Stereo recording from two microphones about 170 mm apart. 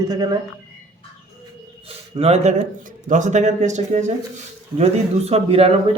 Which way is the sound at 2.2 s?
35° right (ahead or behind).